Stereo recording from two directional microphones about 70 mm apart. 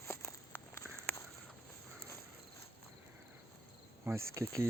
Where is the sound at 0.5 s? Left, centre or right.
Left.